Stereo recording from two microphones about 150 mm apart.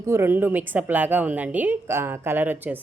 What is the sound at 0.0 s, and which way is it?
A woman's voice, 15° right (ahead or behind).